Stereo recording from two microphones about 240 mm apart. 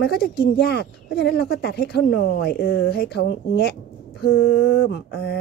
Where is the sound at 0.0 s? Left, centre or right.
Left.